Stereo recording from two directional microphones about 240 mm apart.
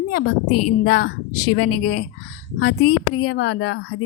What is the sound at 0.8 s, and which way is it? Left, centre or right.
Speech, left.